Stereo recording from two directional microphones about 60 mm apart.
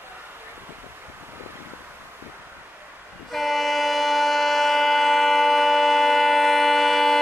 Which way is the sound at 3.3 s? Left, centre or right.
Centre.